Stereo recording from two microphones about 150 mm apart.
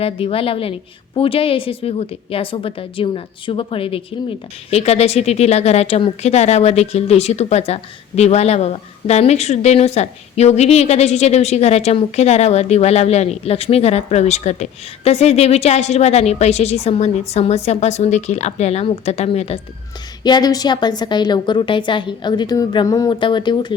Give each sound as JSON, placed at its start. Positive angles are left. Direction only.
{"t": 0.0, "sound": "a woman's voice", "side_deg": 40}
{"t": 20.2, "sound": "a woman's voice", "side_deg": 25}